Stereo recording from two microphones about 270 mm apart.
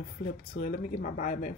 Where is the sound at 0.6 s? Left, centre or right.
Left.